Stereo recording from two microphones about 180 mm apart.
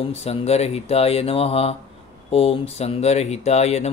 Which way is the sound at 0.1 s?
35° left (ahead or behind).